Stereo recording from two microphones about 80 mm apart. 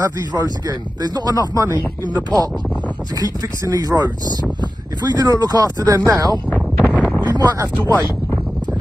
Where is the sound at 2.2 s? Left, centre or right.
Right.